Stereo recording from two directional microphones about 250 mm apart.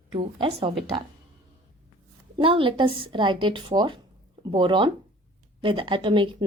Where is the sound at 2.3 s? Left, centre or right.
Right.